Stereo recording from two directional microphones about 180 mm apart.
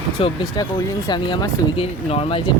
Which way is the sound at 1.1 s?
25° left (ahead or behind).